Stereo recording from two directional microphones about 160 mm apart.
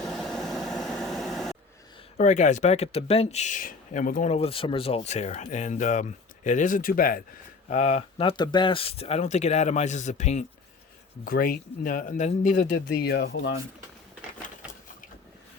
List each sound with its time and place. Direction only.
0.0 s vehicle: 5° left (ahead or behind)
2.1 s speech: 50° left (ahead or behind)
7.7 s speech: 45° left (ahead or behind)
11.3 s speech: 65° left (ahead or behind); by 13.5 s 85° left